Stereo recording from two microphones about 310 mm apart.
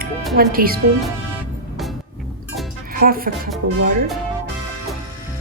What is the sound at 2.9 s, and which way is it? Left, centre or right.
Speech, right.